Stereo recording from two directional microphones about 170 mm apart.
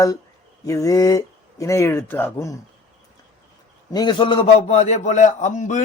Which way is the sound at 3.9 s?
25° left (ahead or behind).